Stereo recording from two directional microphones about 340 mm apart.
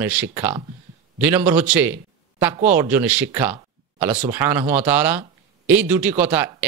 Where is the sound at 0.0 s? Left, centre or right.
Centre.